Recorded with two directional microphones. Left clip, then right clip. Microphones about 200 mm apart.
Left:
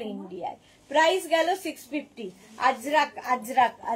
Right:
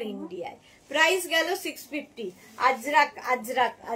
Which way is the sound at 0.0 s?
20° right (ahead or behind).